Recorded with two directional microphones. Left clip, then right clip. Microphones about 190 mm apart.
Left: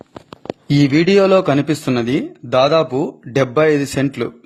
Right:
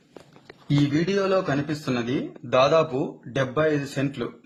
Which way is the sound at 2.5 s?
25° left (ahead or behind).